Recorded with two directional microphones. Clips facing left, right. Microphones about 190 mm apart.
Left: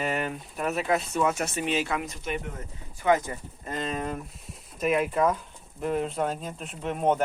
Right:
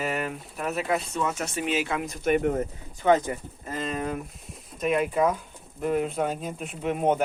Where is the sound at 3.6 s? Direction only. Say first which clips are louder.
Right 1 dB; centre (ahead or behind).